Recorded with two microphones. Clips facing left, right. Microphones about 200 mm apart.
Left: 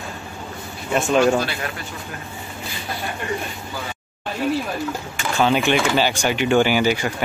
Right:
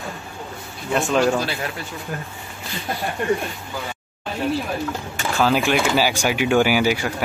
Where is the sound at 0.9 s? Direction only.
Centre (ahead or behind).